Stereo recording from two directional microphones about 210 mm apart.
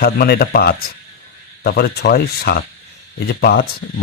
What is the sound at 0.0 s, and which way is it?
Speech, 45° left (ahead or behind).